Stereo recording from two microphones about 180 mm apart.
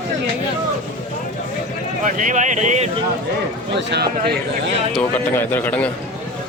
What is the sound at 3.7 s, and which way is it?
Speech, 70° right (ahead or behind).